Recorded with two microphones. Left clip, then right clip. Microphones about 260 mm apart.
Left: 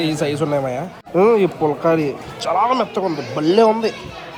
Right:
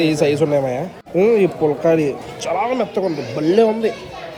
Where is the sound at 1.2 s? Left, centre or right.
Left.